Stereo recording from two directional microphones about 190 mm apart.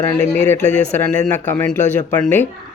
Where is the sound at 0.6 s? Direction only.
35° left (ahead or behind).